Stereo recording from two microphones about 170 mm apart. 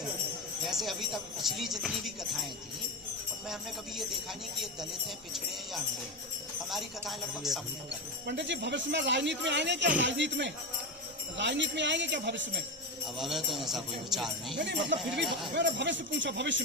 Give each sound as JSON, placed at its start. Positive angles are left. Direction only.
{"t": 0.6, "sound": "speech", "side_deg": 0}
{"t": 6.7, "sound": "speech", "side_deg": 0}
{"t": 8.3, "sound": "speech", "side_deg": -90}
{"t": 13.1, "sound": "speech", "side_deg": 0}
{"t": 14.9, "sound": "speech", "side_deg": -90}